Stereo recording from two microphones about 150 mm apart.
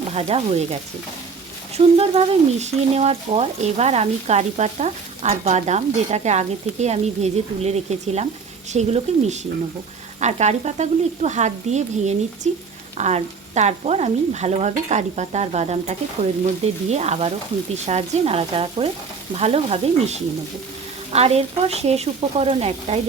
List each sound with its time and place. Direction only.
0.1 s speech: 40° right (ahead or behind)
17.8 s stir: 45° right (ahead or behind)
19.4 s speech: 40° right (ahead or behind)